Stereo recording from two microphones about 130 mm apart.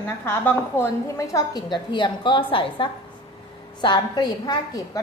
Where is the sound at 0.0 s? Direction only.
15° left (ahead or behind).